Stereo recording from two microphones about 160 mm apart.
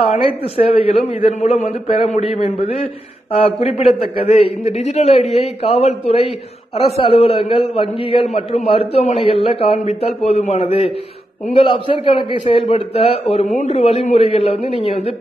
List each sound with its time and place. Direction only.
0.4 s a man's voice: 35° left (ahead or behind)